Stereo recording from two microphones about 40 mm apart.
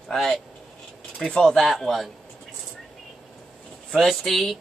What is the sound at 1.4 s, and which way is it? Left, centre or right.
Speech, centre.